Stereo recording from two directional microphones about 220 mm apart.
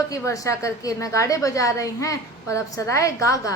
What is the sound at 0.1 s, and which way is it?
A woman's voice, 15° left (ahead or behind).